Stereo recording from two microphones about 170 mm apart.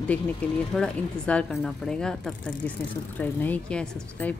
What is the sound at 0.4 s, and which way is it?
Speech, 10° left (ahead or behind).